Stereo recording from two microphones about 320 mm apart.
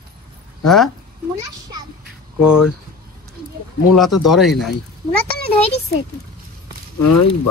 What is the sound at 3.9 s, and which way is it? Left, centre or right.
Speech, centre.